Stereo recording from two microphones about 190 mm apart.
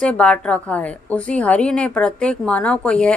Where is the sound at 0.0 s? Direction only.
5° left (ahead or behind).